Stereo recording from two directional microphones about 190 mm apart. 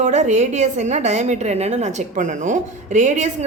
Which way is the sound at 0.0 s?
40° right (ahead or behind).